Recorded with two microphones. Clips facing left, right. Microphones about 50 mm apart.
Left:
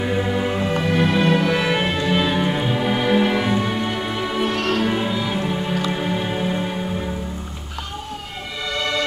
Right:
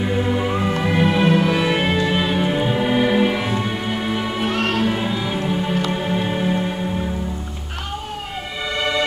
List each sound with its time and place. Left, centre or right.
0.0 s music: centre
4.8 s music: centre
8.7 s music: centre